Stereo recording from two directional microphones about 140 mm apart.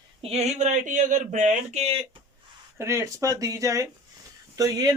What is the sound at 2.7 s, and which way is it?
Speech, 20° right (ahead or behind).